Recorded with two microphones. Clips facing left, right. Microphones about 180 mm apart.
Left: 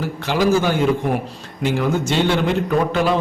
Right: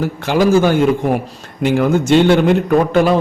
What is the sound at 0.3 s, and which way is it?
A man's voice, 50° right (ahead or behind).